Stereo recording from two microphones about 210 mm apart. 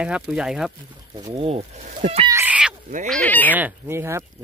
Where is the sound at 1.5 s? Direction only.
30° right (ahead or behind).